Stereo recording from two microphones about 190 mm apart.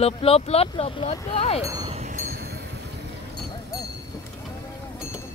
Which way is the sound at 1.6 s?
20° right (ahead or behind).